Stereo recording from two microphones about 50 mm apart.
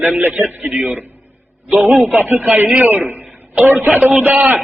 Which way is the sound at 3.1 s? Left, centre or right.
Right.